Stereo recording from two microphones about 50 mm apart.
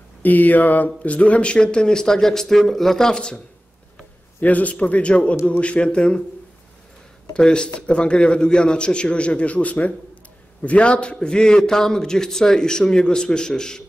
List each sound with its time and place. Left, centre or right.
0.2 s a man's voice: left; by 3.3 s centre
4.4 s a man's voice: left
7.3 s a man's voice: centre